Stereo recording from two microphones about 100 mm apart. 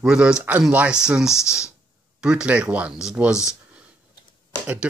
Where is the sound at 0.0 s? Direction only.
10° right (ahead or behind).